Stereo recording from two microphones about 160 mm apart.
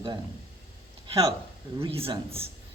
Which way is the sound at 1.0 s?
30° right (ahead or behind).